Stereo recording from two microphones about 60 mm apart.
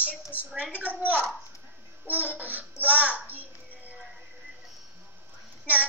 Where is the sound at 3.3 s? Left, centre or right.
Right.